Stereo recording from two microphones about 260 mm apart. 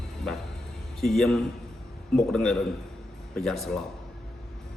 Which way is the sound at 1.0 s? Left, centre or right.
Centre.